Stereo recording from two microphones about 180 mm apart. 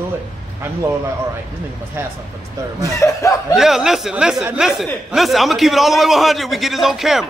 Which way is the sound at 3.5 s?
Centre (ahead or behind).